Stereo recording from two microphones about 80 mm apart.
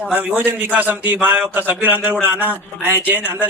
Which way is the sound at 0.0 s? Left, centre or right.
Centre.